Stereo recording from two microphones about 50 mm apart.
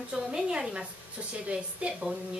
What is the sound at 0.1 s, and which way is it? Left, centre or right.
A woman's voice, centre.